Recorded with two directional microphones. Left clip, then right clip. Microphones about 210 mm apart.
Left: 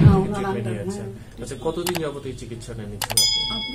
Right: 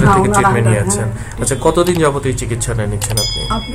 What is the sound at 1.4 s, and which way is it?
Speech, 50° right (ahead or behind).